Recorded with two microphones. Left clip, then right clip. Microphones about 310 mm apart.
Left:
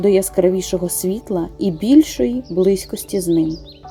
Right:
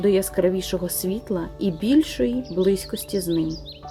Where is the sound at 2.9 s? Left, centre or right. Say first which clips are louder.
Left 3 dB; centre.